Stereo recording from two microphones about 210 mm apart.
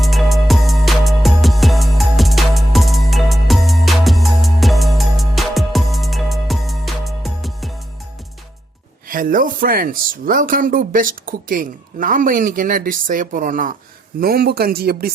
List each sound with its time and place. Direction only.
0.0 s music: centre (ahead or behind)
9.0 s speech: 40° right (ahead or behind)